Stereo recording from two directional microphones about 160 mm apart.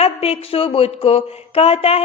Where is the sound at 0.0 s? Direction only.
40° left (ahead or behind).